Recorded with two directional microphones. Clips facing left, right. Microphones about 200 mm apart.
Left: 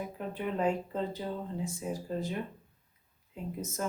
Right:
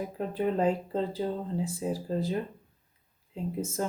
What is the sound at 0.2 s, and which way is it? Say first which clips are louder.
Speech: right 5 dB; 35° right (ahead or behind).